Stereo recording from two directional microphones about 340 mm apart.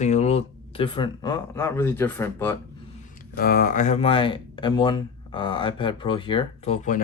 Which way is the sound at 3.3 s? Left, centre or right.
Left.